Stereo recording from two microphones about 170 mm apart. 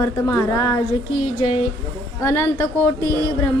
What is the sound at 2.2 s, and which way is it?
Speech, 15° left (ahead or behind).